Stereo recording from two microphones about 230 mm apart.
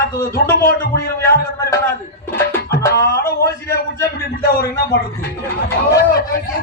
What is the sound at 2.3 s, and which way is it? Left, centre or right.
Music, centre.